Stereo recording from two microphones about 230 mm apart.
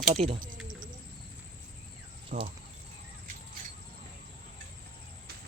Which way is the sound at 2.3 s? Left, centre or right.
Right.